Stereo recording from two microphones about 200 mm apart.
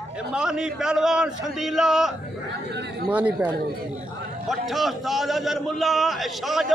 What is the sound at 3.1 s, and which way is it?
A man's voice, 5° right (ahead or behind).